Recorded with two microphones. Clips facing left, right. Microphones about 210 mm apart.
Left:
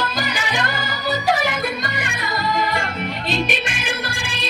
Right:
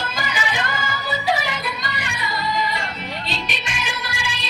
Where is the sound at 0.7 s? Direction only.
35° left (ahead or behind).